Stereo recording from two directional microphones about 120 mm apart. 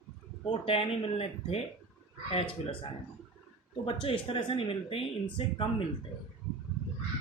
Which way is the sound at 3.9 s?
45° left (ahead or behind).